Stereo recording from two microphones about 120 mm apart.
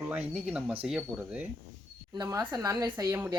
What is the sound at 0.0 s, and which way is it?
Speech, 10° right (ahead or behind).